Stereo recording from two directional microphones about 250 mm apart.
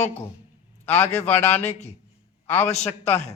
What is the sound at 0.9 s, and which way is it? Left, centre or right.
Speech, centre.